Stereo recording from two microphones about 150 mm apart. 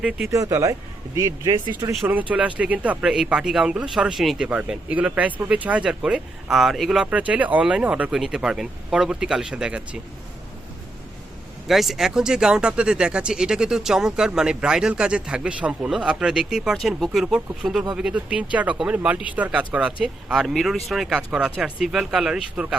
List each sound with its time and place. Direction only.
0.3 s speech: 20° right (ahead or behind)
2.3 s speech: 10° right (ahead or behind)
11.7 s speech: centre (ahead or behind)